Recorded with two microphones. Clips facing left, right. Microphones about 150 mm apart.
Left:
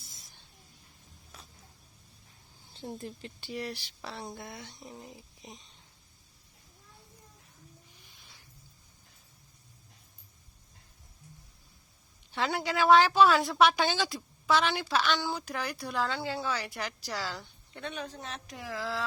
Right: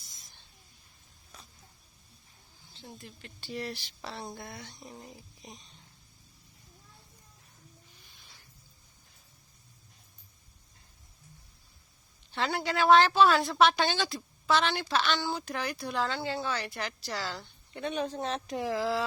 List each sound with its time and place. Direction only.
2.7 s speech: 45° left (ahead or behind)
3.4 s a woman's voice: 10° left (ahead or behind)
12.3 s a woman's voice: 10° left (ahead or behind)
17.9 s speech: 30° right (ahead or behind)